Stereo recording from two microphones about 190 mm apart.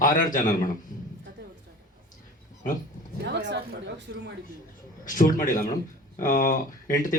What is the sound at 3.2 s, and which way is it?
A man's voice, 60° right (ahead or behind).